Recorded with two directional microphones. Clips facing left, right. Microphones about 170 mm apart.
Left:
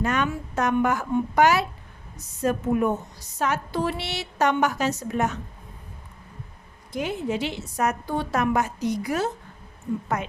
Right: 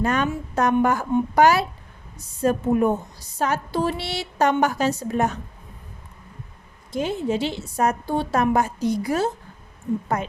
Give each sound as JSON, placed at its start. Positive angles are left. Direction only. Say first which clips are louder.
{"t": 0.0, "sound": "a woman's voice", "louder": "right 2 dB", "side_deg": -35}
{"t": 6.9, "sound": "a woman's voice", "louder": "right 3 dB", "side_deg": -30}